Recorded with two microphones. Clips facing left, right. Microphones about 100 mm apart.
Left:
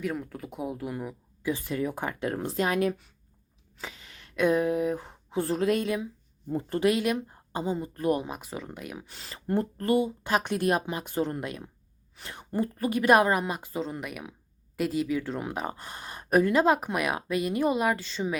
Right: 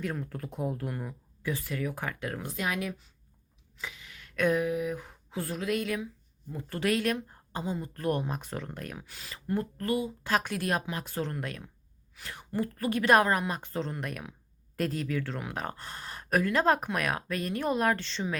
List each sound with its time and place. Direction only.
0.0 s speech: centre (ahead or behind); by 2.9 s 35° left (ahead or behind)
3.8 s a sound: 35° left (ahead or behind)
4.4 s a sound: 20° left (ahead or behind)
4.6 s speech: 35° left (ahead or behind)
6.7 s speech: 20° left (ahead or behind)
9.0 s speech: 30° left (ahead or behind); by 18.3 s 10° left (ahead or behind)